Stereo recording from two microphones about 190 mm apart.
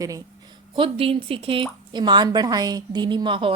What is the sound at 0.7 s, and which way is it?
A woman's voice, 30° right (ahead or behind).